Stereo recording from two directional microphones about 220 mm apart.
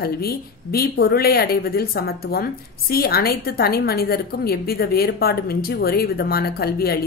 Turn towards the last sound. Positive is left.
turn(degrees=45)  # may be behind; listen again after turning